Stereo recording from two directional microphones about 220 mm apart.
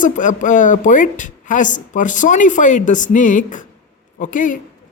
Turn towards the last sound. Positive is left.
turn(degrees=35)  # may be behind; listen again after turning